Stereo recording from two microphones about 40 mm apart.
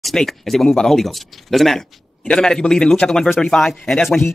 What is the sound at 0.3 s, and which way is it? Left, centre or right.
Speech, centre.